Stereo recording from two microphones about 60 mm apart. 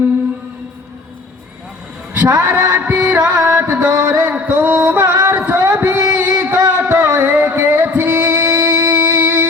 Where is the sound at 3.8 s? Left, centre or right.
Right.